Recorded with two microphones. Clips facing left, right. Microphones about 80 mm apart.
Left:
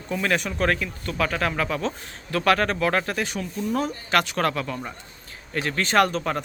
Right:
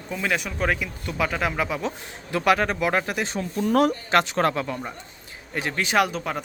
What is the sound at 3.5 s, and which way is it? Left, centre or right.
Speech, right.